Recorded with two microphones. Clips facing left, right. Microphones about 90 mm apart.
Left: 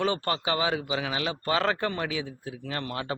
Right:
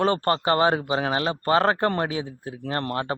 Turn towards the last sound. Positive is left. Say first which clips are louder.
# right 5 dB
turn(degrees=-40)  # may be behind; listen again after turning